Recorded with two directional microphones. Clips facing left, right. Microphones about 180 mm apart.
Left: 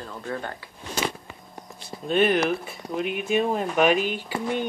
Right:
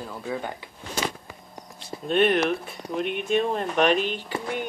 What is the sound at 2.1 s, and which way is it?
Speech, centre (ahead or behind).